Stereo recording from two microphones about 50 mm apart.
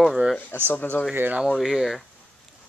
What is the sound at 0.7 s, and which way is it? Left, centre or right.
Speech, left.